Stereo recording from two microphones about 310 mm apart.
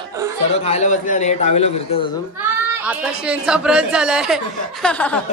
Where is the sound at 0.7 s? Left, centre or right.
Left.